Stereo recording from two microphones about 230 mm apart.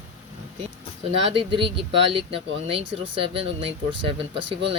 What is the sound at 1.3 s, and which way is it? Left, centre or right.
Speech, right.